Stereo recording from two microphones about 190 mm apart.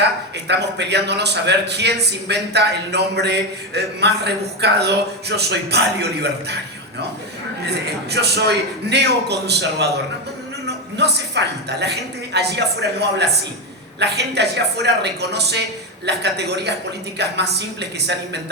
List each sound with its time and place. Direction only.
0.4 s a man's voice: 65° right (ahead or behind)
8.1 s a man's voice: 60° right (ahead or behind)
10.9 s a man's voice: 60° right (ahead or behind)